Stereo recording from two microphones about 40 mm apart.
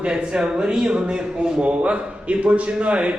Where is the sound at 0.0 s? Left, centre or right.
Right.